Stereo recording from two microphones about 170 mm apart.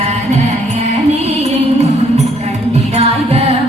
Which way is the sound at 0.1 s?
40° right (ahead or behind).